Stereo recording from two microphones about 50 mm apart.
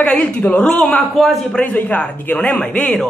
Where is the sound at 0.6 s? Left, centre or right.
Centre.